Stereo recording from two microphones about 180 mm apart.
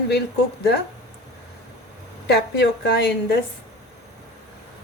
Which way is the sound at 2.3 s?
65° left (ahead or behind).